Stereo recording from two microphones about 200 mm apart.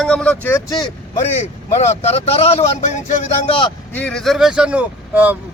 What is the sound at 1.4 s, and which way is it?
A man's voice, 35° left (ahead or behind).